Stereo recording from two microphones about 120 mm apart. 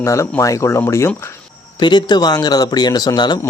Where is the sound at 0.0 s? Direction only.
25° left (ahead or behind).